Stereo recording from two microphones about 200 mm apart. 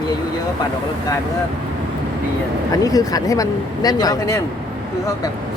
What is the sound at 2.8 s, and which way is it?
Speech, 20° left (ahead or behind).